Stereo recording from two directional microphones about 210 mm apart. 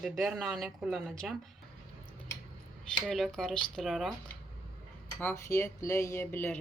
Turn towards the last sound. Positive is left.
turn(degrees=10)  # may be behind; listen again after turning